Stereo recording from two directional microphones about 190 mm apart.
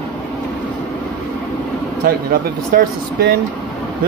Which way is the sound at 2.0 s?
50° right (ahead or behind).